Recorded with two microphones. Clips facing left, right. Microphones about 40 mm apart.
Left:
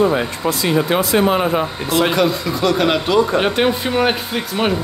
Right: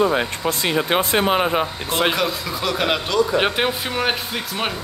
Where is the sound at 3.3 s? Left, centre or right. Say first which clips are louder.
Left 3 dB; centre.